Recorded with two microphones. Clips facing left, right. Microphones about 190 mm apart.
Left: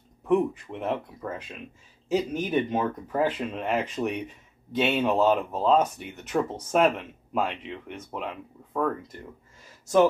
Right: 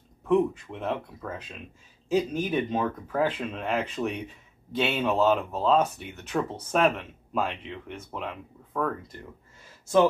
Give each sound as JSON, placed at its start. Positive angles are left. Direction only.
{"t": 0.3, "sound": "speech", "side_deg": 15}
{"t": 2.5, "sound": "speech", "side_deg": 10}